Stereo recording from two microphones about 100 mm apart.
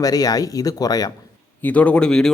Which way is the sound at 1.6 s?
15° left (ahead or behind).